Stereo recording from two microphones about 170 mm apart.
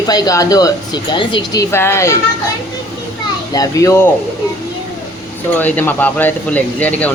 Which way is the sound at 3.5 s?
20° left (ahead or behind).